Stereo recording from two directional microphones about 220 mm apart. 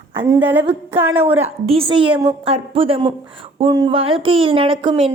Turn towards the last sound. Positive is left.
turn(degrees=-25)  # may be behind; listen again after turning